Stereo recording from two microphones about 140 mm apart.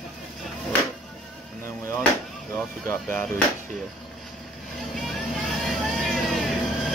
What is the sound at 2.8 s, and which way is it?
Speech, 15° left (ahead or behind).